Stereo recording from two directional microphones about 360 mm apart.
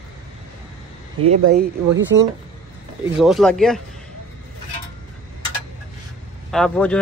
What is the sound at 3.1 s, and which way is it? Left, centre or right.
Speech, centre.